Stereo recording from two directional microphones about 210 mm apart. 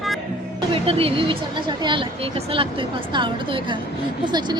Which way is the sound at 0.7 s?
25° right (ahead or behind).